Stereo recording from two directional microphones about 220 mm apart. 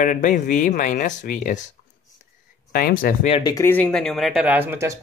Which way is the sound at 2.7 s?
40° left (ahead or behind).